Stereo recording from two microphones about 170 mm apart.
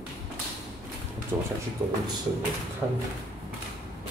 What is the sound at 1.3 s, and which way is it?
Speech, 20° right (ahead or behind).